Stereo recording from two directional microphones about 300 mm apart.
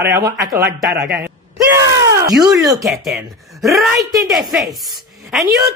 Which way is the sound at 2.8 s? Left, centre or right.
Centre.